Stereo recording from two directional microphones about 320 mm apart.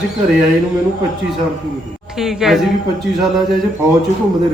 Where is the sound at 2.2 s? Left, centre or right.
Centre.